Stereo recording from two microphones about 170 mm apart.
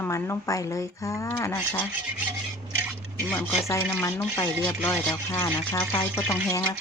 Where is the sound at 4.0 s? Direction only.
15° left (ahead or behind).